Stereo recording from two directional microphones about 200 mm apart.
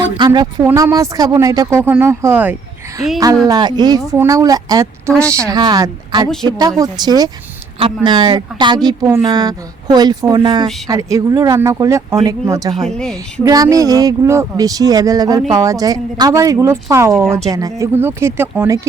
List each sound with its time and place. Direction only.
0.0 s speech: 20° right (ahead or behind)
3.4 s speech: 20° right (ahead or behind)
12.9 s a woman's voice: 5° left (ahead or behind)
13.4 s speech: 15° right (ahead or behind)